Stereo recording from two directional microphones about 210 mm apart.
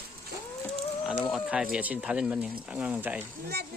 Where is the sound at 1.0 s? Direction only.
Centre (ahead or behind).